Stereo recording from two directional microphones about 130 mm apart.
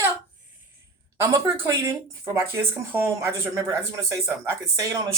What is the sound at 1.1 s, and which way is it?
Speech, 20° right (ahead or behind).